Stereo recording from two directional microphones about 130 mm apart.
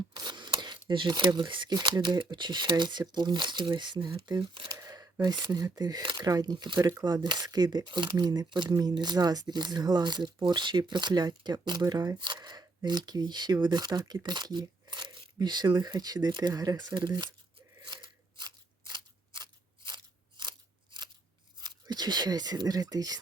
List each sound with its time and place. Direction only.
0.1 s a sound: 35° right (ahead or behind)
0.9 s speech: 35° right (ahead or behind)
4.7 s speech: 25° right (ahead or behind)
17.8 s scissors: 35° right (ahead or behind)
21.6 s speech: 35° right (ahead or behind)